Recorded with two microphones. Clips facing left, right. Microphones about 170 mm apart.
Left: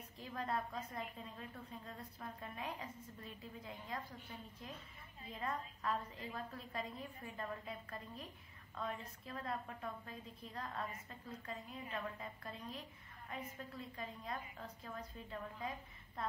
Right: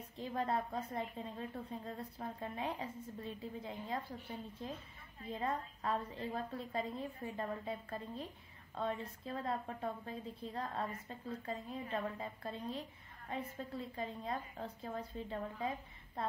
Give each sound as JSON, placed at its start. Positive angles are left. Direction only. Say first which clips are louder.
{"t": 0.2, "sound": "a woman's voice", "louder": "right 5 dB", "side_deg": -30}